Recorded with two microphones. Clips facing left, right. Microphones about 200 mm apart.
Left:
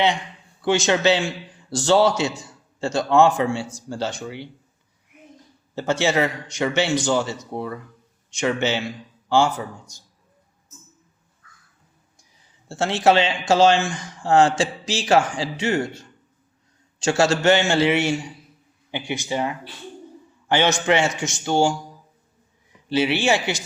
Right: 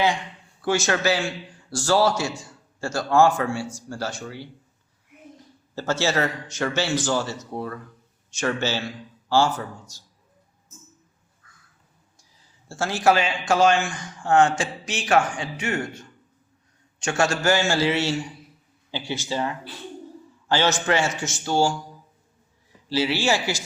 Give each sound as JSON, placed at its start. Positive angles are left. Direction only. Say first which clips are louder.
{"t": 0.6, "sound": "speech", "louder": "left 4 dB", "side_deg": 20}
{"t": 5.7, "sound": "a man's voice", "louder": "left 3 dB", "side_deg": 15}
{"t": 12.6, "sound": "speech", "louder": "left 2 dB", "side_deg": 20}
{"t": 17.0, "sound": "a man's voice", "louder": "left 4 dB", "side_deg": 25}
{"t": 22.9, "sound": "speech", "louder": "left 3 dB", "side_deg": 20}